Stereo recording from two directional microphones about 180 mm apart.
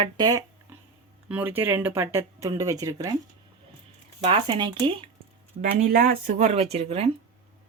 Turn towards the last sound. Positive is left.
turn(degrees=-35)  # may be behind; listen again after turning